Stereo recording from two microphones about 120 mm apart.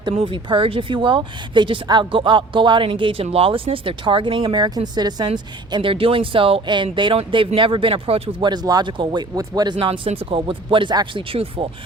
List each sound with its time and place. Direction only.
0.1 s speech: 50° right (ahead or behind)
5.7 s speech: 45° right (ahead or behind)